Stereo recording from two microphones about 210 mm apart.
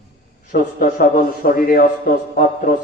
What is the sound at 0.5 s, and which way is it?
A man's voice, 40° left (ahead or behind).